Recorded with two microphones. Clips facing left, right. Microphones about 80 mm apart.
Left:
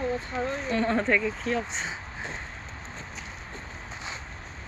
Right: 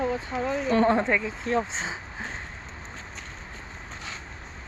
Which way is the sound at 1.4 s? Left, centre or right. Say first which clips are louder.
Right 3 dB; right.